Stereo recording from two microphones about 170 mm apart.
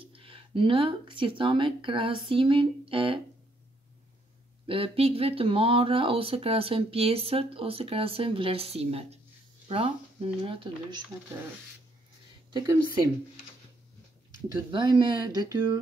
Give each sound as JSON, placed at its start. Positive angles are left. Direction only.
{"t": 0.0, "sound": "speech", "side_deg": -30}
{"t": 4.6, "sound": "speech", "side_deg": -35}
{"t": 12.4, "sound": "speech", "side_deg": -25}
{"t": 14.7, "sound": "speech", "side_deg": -25}